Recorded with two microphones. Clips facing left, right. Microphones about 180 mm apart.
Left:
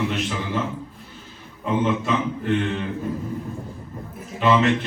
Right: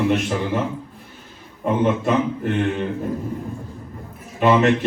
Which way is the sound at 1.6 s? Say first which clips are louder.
Right 3 dB; 55° right (ahead or behind).